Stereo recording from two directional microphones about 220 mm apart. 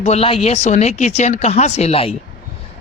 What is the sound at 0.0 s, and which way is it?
Speech, 30° left (ahead or behind).